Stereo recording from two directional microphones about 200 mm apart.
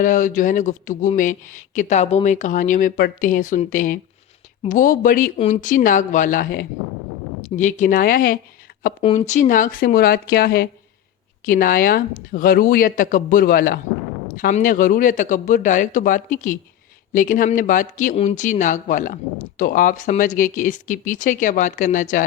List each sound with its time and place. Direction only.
0.0 s speech: 40° left (ahead or behind)